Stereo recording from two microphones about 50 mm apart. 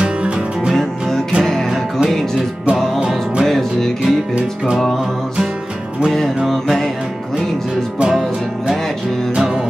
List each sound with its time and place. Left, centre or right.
3.0 s music: centre
3.4 s music: centre
6.1 s music: centre
9.3 s music: centre